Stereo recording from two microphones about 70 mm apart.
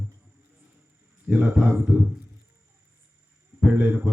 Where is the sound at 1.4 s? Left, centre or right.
Right.